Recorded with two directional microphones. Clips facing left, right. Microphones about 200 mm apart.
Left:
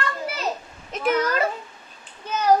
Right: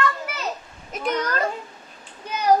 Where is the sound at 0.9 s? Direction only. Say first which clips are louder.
Left 3 dB; 5° left (ahead or behind).